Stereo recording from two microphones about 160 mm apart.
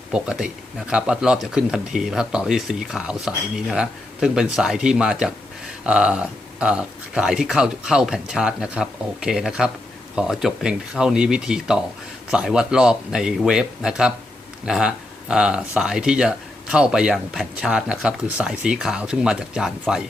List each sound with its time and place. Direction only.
0.1 s speech: 5° right (ahead or behind)